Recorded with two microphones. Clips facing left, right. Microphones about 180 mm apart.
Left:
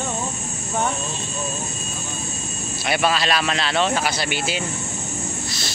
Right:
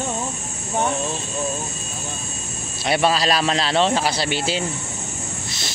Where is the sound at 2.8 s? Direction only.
30° right (ahead or behind).